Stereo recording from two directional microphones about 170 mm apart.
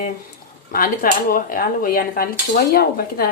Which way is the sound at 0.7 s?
55° left (ahead or behind).